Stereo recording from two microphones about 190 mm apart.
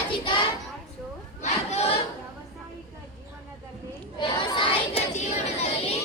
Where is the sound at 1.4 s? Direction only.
35° left (ahead or behind).